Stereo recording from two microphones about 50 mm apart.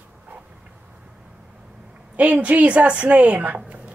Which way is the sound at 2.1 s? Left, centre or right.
Right.